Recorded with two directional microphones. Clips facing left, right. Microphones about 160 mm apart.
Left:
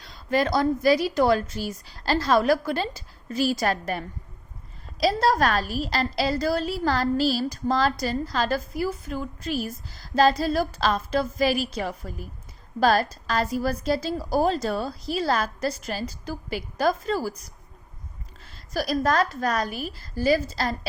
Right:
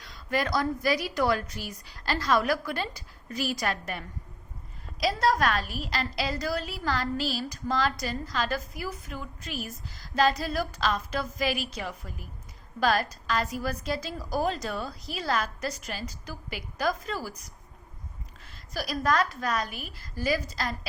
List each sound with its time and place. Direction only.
0.0 s a woman's voice: 30° left (ahead or behind)
18.7 s a woman's voice: 40° left (ahead or behind)